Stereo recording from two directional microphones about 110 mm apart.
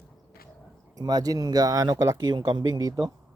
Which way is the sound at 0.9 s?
35° right (ahead or behind).